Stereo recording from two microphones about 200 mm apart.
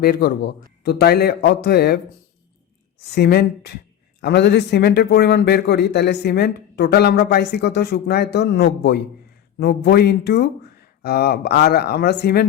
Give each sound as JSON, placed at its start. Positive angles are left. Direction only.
{"t": 0.0, "sound": "speech", "side_deg": 45}
{"t": 3.0, "sound": "a man's voice", "side_deg": 55}